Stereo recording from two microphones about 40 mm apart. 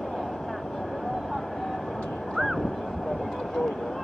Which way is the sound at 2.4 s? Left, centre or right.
Centre.